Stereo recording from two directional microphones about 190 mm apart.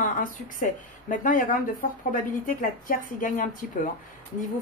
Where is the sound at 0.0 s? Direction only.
45° left (ahead or behind).